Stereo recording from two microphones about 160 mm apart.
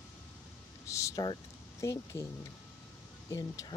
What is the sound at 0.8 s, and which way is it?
Speech, 20° left (ahead or behind).